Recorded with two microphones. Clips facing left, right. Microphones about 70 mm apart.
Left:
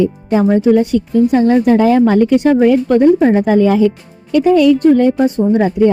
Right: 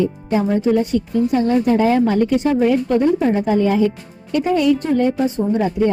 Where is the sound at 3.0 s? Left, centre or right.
Left.